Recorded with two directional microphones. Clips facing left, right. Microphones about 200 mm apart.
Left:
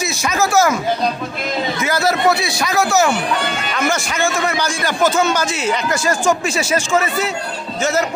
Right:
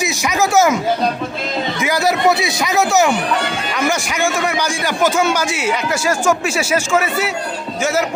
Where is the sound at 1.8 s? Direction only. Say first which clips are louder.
Right 1 dB; 15° right (ahead or behind).